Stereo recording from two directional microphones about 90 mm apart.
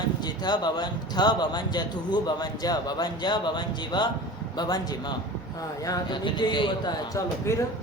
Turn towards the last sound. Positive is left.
turn(degrees=35)  # may be behind; listen again after turning